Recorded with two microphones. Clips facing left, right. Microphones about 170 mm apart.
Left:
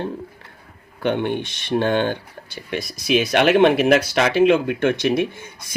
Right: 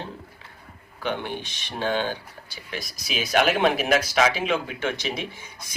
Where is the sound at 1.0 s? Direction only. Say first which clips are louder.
Left 8 dB; 60° left (ahead or behind).